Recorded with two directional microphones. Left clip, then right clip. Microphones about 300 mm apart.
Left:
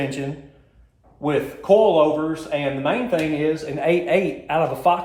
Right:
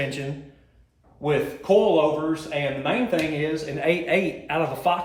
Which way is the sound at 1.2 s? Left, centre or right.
Centre.